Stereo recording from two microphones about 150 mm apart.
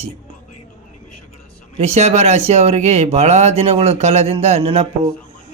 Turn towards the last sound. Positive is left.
turn(degrees=-40)  # may be behind; listen again after turning